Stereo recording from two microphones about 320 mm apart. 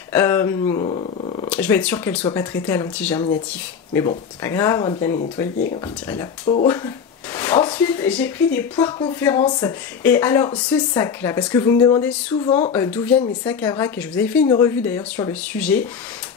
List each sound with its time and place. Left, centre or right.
0.1 s speech: centre
1.5 s speech: centre
4.4 s speech: centre
6.4 s speech: centre
7.3 s speech: centre
12.4 s speech: centre
12.7 s speech: centre